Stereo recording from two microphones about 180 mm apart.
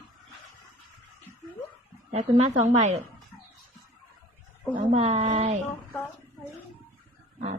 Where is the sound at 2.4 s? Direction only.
40° right (ahead or behind).